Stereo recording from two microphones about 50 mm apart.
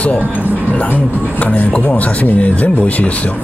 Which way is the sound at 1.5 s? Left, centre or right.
Left.